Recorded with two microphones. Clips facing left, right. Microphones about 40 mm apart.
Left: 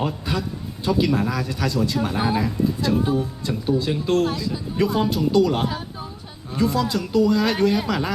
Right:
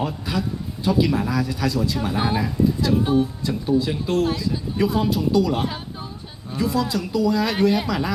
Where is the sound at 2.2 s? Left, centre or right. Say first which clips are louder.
Even; right.